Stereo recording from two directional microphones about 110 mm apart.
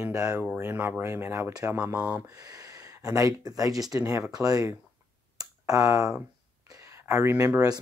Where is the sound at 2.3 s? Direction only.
35° right (ahead or behind).